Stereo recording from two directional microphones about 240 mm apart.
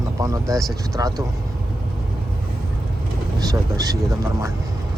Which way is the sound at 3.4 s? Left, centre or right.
Centre.